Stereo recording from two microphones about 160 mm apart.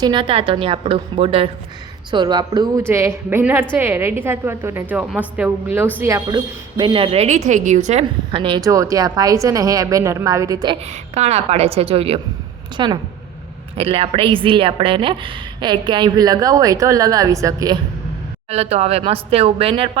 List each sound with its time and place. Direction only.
0.0 s a woman's voice: 30° right (ahead or behind)
11.1 s a woman's voice: 40° right (ahead or behind); by 17.7 s 20° right (ahead or behind)
18.5 s speech: 40° right (ahead or behind)